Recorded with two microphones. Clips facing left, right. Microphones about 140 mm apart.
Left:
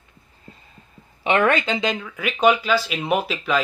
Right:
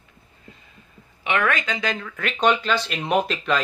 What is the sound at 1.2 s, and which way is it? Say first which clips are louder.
Speech: left 5 dB; 30° left (ahead or behind).